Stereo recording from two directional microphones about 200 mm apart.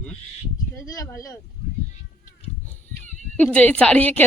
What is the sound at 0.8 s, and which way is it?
Speech, 15° left (ahead or behind).